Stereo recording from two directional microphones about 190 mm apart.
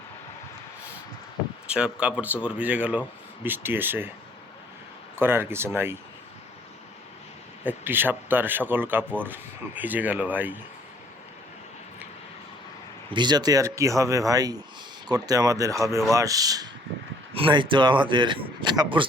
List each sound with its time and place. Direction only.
1.6 s speech: 5° right (ahead or behind)
5.1 s speech: 10° right (ahead or behind)
7.6 s speech: 10° right (ahead or behind)
13.1 s a man's voice: 25° right (ahead or behind)